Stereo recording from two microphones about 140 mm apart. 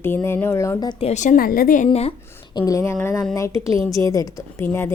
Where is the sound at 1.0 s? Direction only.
55° left (ahead or behind); by 1.9 s 75° left (ahead or behind).